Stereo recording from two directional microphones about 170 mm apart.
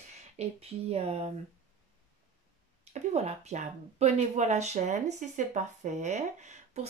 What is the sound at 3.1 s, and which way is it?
Speech, 40° right (ahead or behind).